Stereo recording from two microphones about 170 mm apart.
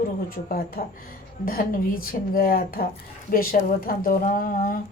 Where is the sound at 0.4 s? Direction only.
60° left (ahead or behind).